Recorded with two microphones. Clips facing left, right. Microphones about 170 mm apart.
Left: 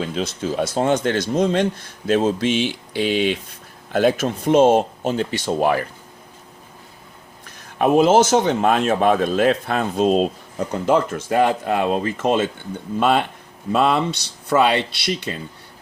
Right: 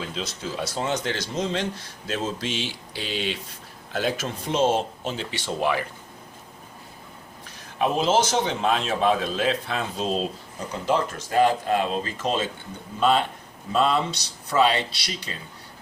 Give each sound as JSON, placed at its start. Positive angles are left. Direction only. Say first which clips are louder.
{"t": 0.1, "sound": "a man's voice", "louder": "left 8 dB", "side_deg": 55}
{"t": 7.8, "sound": "a man's voice", "louder": "left 7 dB", "side_deg": 55}